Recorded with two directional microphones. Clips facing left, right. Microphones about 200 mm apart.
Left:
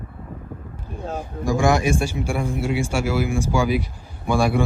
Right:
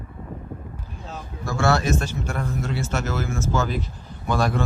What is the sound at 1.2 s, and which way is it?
A man's voice, 15° left (ahead or behind).